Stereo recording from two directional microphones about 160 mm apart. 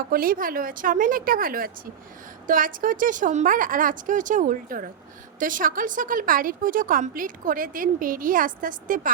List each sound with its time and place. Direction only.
0.1 s speech: 65° right (ahead or behind)